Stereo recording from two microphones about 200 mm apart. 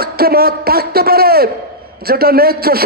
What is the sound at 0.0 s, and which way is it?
A man's voice, 50° right (ahead or behind).